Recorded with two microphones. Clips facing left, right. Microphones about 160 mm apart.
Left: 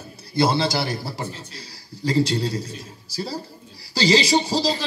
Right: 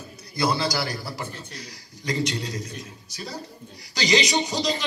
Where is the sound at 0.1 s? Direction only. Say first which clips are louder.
Left 5 dB; 30° left (ahead or behind).